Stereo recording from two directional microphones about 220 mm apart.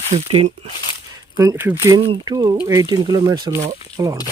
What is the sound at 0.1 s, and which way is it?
Speech, 30° right (ahead or behind).